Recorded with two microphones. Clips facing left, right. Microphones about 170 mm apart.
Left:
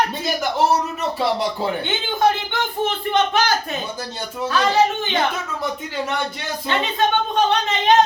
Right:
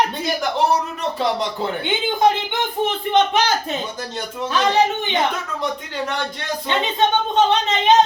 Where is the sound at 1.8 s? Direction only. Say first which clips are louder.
Right 3 dB; 20° right (ahead or behind).